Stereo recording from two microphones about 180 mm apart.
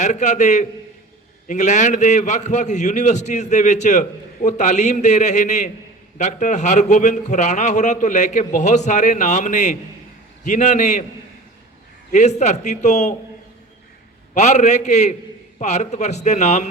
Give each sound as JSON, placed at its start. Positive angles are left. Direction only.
{"t": 0.0, "sound": "a man's voice", "side_deg": 40}
{"t": 12.1, "sound": "a man's voice", "side_deg": 40}
{"t": 14.3, "sound": "a man's voice", "side_deg": 40}